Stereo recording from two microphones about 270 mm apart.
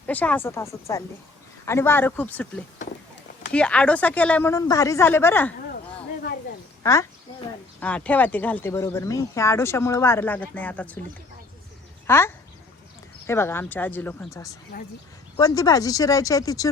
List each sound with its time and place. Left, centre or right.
0.0 s speech: centre
6.8 s speech: centre
12.0 s speech: centre
14.7 s speech: left
15.4 s speech: centre